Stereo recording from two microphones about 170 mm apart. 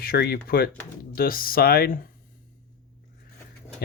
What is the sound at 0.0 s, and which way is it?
Speech, 70° left (ahead or behind).